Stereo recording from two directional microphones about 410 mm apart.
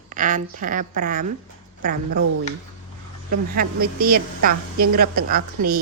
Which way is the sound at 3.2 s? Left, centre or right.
Right.